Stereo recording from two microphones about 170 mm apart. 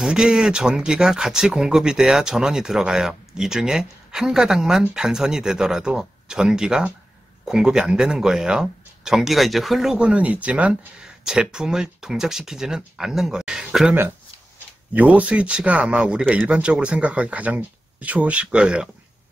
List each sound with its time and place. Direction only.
0.0 s speech: 5° right (ahead or behind)